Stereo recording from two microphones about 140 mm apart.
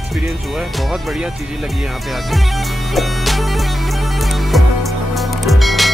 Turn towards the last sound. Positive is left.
turn(degrees=0)  # may be behind; listen again after turning